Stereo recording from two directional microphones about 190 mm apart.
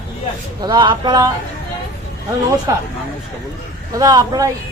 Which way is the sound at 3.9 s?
20° right (ahead or behind).